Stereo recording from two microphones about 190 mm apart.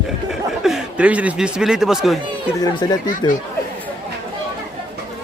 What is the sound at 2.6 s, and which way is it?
Speech, 20° left (ahead or behind).